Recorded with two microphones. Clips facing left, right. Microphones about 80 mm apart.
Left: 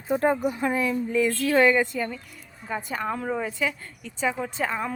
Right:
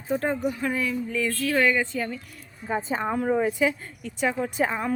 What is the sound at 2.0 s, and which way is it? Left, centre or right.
Speech, centre.